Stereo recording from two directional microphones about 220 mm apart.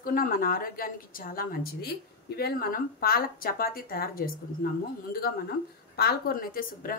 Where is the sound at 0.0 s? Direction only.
40° left (ahead or behind).